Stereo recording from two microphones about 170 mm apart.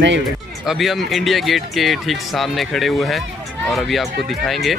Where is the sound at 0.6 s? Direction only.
Centre (ahead or behind).